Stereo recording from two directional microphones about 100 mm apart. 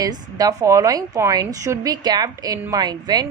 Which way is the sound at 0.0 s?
40° right (ahead or behind).